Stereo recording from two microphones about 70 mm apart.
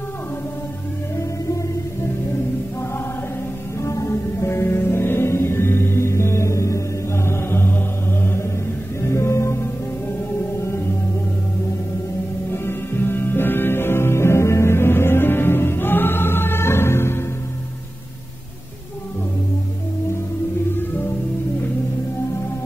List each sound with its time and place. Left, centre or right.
3.8 s music: left
12.6 s music: left
20.7 s music: left